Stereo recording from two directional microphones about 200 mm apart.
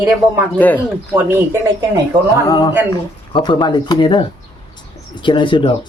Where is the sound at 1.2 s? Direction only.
10° right (ahead or behind).